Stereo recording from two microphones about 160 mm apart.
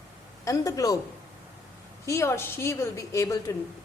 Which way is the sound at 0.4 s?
20° left (ahead or behind).